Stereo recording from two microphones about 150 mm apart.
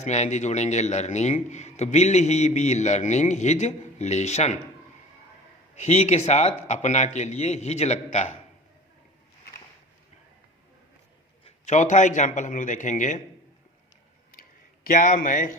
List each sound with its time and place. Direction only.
0.0 s a man's voice: 50° left (ahead or behind)
5.7 s a man's voice: 45° left (ahead or behind)
11.4 s a man's voice: 50° left (ahead or behind)
14.4 s a sound: 75° left (ahead or behind)
14.9 s a man's voice: 60° left (ahead or behind)